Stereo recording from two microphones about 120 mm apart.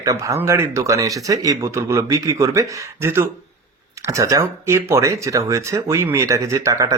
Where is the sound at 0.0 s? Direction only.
25° right (ahead or behind).